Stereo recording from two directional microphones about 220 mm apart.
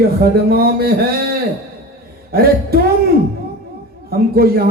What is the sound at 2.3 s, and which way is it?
Speech, 45° right (ahead or behind).